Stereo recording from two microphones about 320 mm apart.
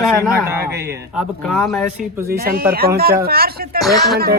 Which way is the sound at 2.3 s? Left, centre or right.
Right.